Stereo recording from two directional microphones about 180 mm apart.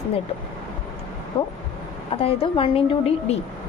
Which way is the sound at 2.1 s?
30° left (ahead or behind).